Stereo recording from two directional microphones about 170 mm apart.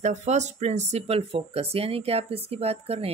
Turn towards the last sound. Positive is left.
turn(degrees=-35)  # may be behind; listen again after turning